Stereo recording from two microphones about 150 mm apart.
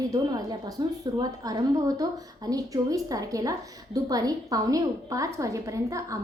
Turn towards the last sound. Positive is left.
turn(degrees=-20)  # may be behind; listen again after turning